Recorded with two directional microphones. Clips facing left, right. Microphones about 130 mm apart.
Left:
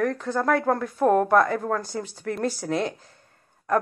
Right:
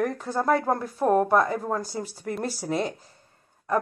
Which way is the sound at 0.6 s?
10° right (ahead or behind).